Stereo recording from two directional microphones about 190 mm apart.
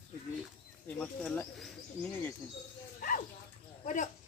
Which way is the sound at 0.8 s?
10° left (ahead or behind).